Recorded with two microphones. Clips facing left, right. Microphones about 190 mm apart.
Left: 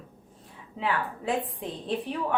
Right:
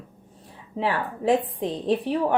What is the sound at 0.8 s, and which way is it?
Speech, 35° right (ahead or behind).